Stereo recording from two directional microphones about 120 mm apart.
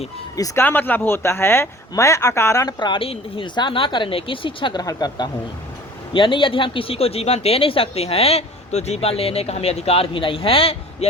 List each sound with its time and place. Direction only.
0.3 s speech: 30° left (ahead or behind)
0.6 s speech: 15° left (ahead or behind)
2.7 s speech: 40° left (ahead or behind)